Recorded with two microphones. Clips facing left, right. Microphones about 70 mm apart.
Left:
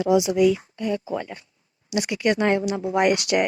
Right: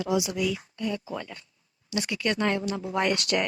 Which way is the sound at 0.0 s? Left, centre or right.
Left.